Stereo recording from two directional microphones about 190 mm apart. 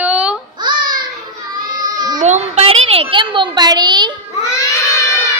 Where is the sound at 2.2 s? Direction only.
35° right (ahead or behind).